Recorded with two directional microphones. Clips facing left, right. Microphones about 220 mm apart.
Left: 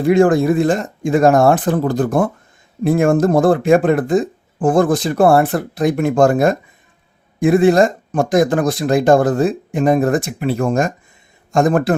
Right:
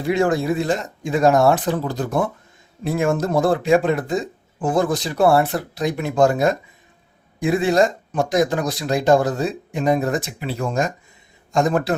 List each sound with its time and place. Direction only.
0.0 s speech: 50° left (ahead or behind)